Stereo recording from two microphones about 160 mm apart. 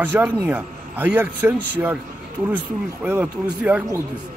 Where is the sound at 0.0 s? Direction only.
10° right (ahead or behind).